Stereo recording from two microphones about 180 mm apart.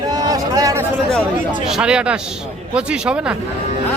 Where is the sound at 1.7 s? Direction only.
5° right (ahead or behind).